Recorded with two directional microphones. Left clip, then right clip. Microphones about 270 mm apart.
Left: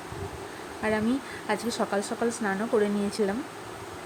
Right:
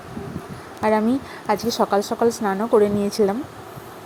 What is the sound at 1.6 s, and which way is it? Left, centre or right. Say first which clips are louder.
Speech: right 9 dB; centre.